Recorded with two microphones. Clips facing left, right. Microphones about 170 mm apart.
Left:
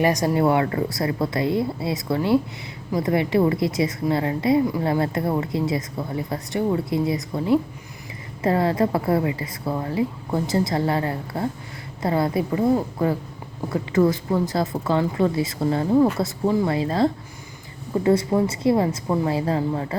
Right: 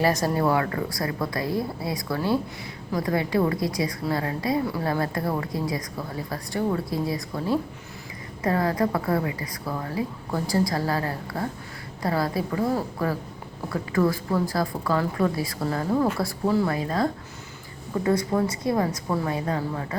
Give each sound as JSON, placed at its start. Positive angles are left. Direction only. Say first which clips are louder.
{"t": 0.0, "sound": "a woman's voice", "louder": "left 3 dB", "side_deg": 15}